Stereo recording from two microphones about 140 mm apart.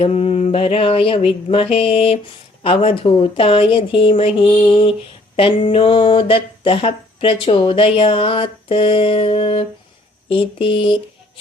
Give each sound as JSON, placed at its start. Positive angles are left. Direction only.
{"t": 0.0, "sound": "speech", "side_deg": 45}